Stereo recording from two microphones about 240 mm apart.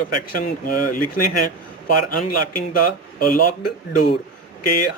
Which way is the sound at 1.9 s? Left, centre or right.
Left.